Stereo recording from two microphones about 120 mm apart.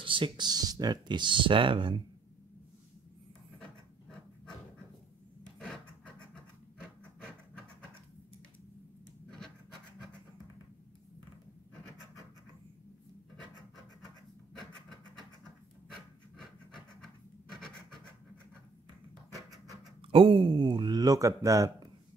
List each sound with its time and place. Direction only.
0.0 s speech: 45° right (ahead or behind)
5.6 s rub: 10° left (ahead or behind)
20.1 s speech: 45° right (ahead or behind); by 21.8 s 30° right (ahead or behind)